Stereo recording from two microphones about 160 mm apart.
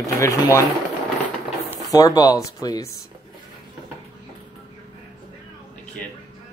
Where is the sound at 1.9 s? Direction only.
20° left (ahead or behind).